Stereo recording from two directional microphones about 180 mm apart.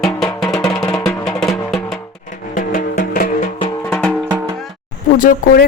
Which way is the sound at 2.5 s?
50° left (ahead or behind).